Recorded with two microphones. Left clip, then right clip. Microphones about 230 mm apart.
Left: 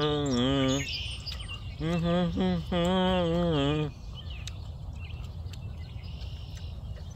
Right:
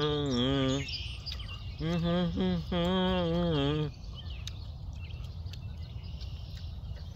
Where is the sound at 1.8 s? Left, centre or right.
Centre.